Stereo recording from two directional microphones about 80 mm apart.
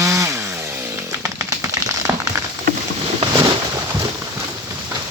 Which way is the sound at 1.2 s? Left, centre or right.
Right.